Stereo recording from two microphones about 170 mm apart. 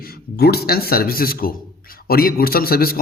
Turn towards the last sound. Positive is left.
turn(degrees=60)  # may be behind; listen again after turning